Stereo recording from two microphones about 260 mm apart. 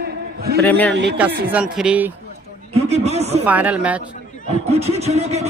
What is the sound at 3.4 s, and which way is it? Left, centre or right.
Speech, centre.